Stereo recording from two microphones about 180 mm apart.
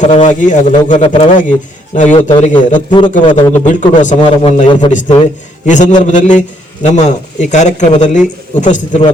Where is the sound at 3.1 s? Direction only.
45° left (ahead or behind).